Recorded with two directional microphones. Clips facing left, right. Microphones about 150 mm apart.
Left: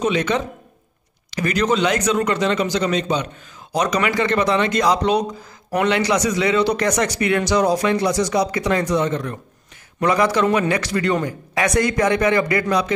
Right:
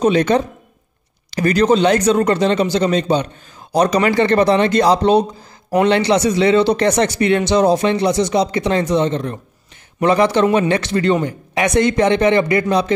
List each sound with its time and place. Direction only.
0.0 s speech: 35° right (ahead or behind)